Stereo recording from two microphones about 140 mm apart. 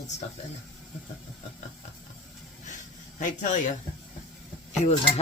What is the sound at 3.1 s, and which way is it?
Speech, 60° left (ahead or behind).